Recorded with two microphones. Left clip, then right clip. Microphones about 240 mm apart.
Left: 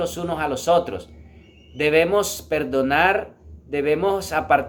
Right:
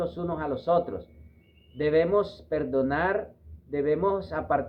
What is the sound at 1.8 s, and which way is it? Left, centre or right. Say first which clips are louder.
Speech: left 5 dB; left.